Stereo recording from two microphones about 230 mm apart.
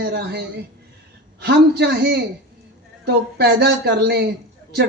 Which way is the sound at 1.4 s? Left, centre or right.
Right.